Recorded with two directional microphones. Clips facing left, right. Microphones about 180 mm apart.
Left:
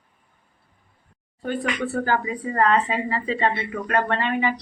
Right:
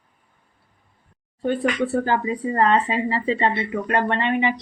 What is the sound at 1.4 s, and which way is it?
Speech, 25° right (ahead or behind).